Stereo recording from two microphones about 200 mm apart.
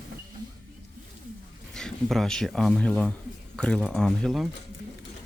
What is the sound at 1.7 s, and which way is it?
Speech, centre (ahead or behind).